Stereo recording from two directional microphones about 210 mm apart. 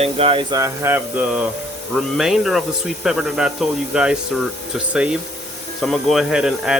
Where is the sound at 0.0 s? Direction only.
25° right (ahead or behind); by 1.5 s 5° right (ahead or behind).